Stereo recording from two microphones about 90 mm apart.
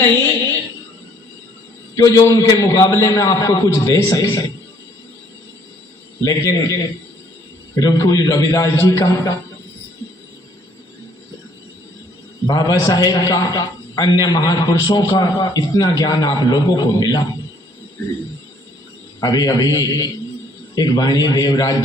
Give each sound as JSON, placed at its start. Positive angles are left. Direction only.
{"t": 0.1, "sound": "a sound", "side_deg": 30}
{"t": 2.0, "sound": "a man's voice", "side_deg": 40}
{"t": 6.2, "sound": "a man's voice", "side_deg": 40}
{"t": 12.5, "sound": "a man's voice", "side_deg": 45}
{"t": 19.2, "sound": "a man's voice", "side_deg": 45}